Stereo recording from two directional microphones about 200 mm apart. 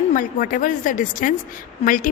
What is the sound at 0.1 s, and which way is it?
A woman's voice, 40° left (ahead or behind).